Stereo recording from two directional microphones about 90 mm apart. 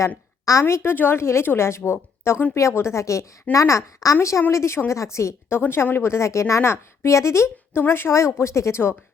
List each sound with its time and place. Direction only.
0.6 s a woman's voice: 25° left (ahead or behind)